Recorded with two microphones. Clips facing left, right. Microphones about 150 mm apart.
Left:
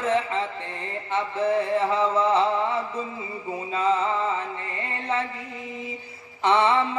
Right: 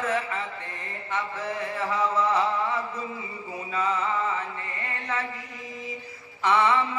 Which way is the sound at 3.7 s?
25° left (ahead or behind).